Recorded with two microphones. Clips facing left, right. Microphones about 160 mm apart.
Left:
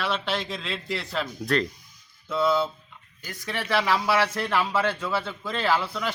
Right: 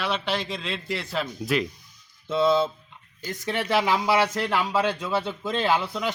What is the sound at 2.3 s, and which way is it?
Speech, 25° right (ahead or behind).